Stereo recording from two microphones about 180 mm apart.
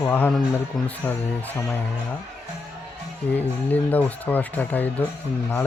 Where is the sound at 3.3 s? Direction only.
10° left (ahead or behind).